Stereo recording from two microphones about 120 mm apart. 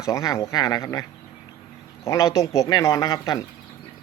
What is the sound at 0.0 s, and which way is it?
Speech, 25° left (ahead or behind).